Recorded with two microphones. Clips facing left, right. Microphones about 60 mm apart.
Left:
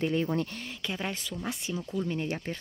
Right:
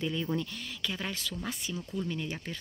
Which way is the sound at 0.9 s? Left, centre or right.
Left.